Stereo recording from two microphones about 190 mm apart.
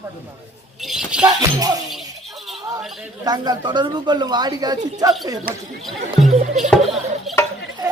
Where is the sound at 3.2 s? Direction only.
20° right (ahead or behind).